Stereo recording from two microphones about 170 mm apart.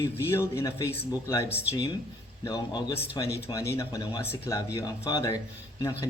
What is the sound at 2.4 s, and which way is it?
A man's voice, 20° left (ahead or behind).